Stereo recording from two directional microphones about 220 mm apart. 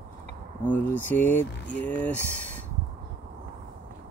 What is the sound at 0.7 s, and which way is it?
Speech, 5° left (ahead or behind).